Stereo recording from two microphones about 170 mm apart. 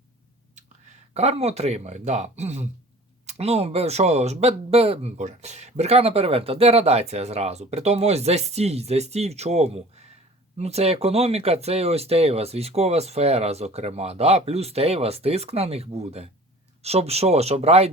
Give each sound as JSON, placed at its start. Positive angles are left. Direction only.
{"t": 1.1, "sound": "speech", "side_deg": -40}